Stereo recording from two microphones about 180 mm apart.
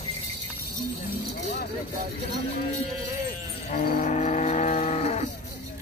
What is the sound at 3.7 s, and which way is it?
Cattle, 50° left (ahead or behind).